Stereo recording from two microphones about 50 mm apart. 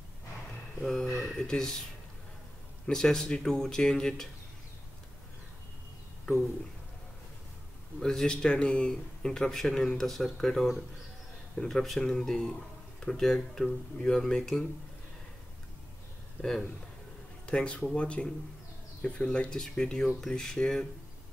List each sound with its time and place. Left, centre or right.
0.7 s speech: centre
1.3 s speech: centre
2.9 s speech: centre
8.0 s speech: centre
16.3 s speech: centre
17.5 s speech: centre